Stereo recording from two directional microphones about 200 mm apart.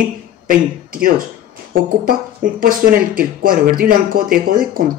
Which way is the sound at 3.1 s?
45° right (ahead or behind).